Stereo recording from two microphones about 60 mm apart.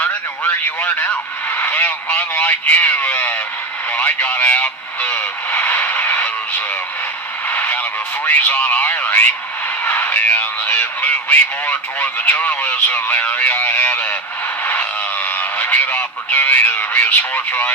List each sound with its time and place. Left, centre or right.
0.8 s speech: left
5.0 s radio: left
7.4 s speech: left
14.6 s a sound: left